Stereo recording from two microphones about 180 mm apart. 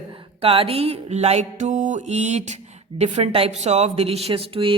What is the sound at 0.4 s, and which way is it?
A woman's voice, 30° right (ahead or behind).